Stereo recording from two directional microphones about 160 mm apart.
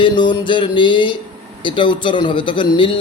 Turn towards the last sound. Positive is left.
turn(degrees=30)  # may be behind; listen again after turning